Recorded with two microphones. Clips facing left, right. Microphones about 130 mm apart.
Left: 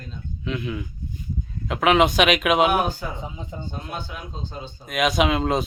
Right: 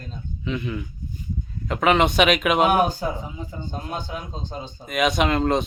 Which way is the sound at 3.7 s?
40° right (ahead or behind).